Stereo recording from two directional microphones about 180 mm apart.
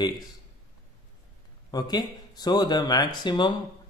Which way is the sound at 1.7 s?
20° left (ahead or behind).